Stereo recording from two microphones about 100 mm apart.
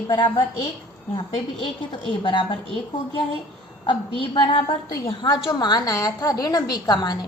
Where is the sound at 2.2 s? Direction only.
60° left (ahead or behind).